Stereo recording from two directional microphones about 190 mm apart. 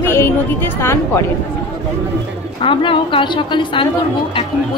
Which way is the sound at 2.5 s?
25° left (ahead or behind).